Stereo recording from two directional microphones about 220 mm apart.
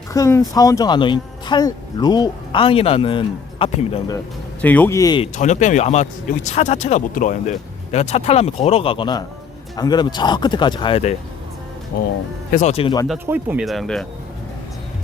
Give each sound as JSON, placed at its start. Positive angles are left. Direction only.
{"t": 0.1, "sound": "speech", "side_deg": 15}
{"t": 4.6, "sound": "a man's voice", "side_deg": 10}
{"t": 5.4, "sound": "speech", "side_deg": 35}
{"t": 12.5, "sound": "speech", "side_deg": 35}
{"t": 13.2, "sound": "speech", "side_deg": -10}